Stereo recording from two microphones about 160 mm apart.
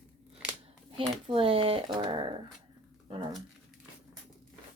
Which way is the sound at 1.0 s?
35° right (ahead or behind).